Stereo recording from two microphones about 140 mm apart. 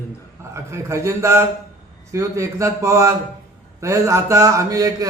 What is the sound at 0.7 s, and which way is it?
A man's voice, 20° right (ahead or behind).